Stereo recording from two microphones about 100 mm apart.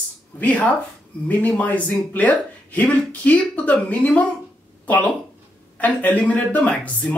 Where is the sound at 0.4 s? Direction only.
15° left (ahead or behind).